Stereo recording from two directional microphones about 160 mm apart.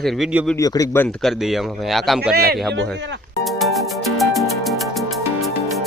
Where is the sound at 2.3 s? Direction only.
75° right (ahead or behind).